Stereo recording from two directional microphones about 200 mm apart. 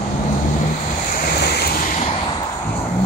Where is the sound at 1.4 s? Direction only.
55° left (ahead or behind).